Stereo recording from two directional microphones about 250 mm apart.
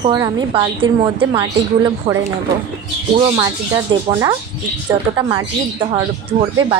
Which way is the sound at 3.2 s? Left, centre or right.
Centre.